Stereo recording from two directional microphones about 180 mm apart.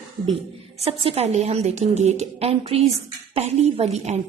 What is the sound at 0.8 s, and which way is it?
A woman's voice, 35° right (ahead or behind).